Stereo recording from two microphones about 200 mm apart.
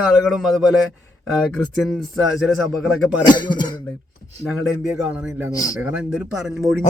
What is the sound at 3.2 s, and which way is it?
Speech, 20° left (ahead or behind).